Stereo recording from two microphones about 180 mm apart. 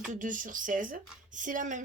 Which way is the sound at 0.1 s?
45° right (ahead or behind).